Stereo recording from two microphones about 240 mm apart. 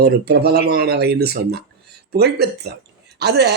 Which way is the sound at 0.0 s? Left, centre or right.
Right.